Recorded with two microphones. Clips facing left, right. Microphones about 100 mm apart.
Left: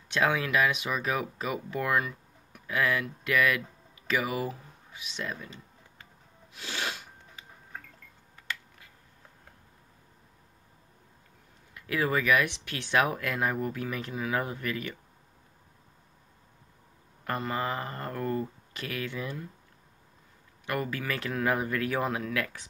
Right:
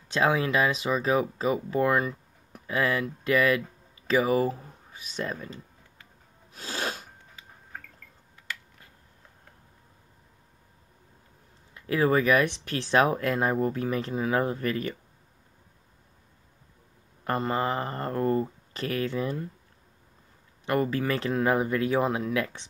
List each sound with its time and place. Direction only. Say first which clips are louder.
0.1 s speech: right 3 dB; 30° right (ahead or behind)
6.5 s sneeze: right 3 dB; 35° right (ahead or behind)
11.7 s speech: right 5 dB; 30° right (ahead or behind)
17.2 s speech: right 4 dB; 30° right (ahead or behind)
20.6 s speech: right 6 dB; 30° right (ahead or behind)